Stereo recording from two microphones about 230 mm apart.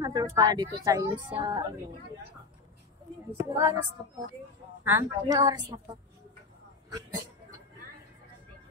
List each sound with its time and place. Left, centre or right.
0.0 s a woman's voice: centre
3.3 s a woman's voice: centre
4.8 s a woman's voice: centre